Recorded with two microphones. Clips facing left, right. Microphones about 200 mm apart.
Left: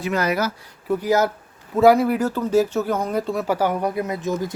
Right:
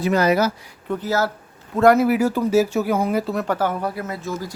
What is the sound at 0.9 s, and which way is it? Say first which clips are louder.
Speech: left 3 dB; 15° left (ahead or behind).